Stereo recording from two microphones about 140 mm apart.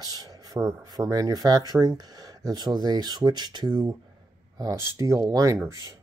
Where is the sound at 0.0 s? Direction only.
25° right (ahead or behind).